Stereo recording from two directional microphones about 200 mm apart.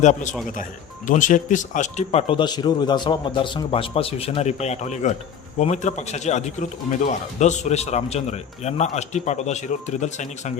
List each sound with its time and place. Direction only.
0.0 s a man's voice: 35° left (ahead or behind)